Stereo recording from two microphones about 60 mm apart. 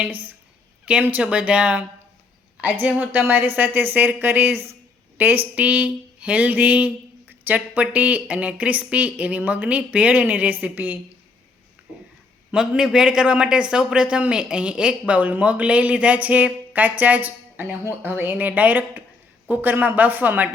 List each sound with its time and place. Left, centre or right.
0.0 s speech: right
12.5 s speech: centre; by 20.5 s right